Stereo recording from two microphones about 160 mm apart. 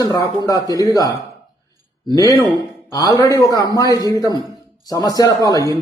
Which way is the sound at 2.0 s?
20° left (ahead or behind).